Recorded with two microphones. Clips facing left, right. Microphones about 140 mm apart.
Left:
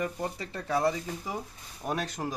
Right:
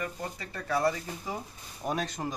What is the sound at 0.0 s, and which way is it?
Speech, 25° left (ahead or behind).